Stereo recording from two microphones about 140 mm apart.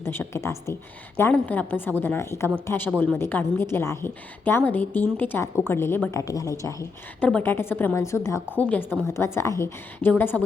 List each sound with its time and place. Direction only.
0.0 s a woman's voice: 20° left (ahead or behind)
7.2 s a woman's voice: 10° left (ahead or behind)